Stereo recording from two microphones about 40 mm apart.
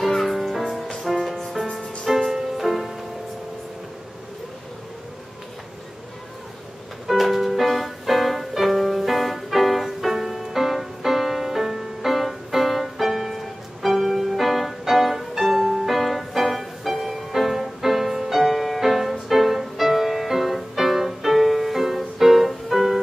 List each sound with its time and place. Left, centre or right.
0.0 s music: centre
7.1 s music: centre